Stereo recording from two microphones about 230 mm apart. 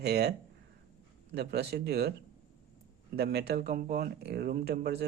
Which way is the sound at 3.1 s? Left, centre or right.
Right.